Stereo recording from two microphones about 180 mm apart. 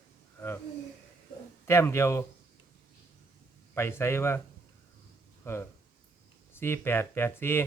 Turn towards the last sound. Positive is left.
turn(degrees=10)  # may be behind; listen again after turning